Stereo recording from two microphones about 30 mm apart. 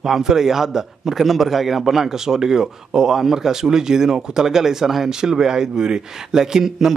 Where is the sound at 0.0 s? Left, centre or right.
Centre.